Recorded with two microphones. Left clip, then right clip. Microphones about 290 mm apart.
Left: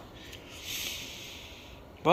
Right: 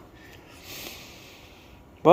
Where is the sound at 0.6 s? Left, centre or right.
Right.